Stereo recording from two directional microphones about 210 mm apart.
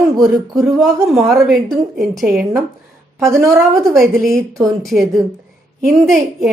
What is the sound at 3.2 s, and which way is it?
Speech, 15° right (ahead or behind).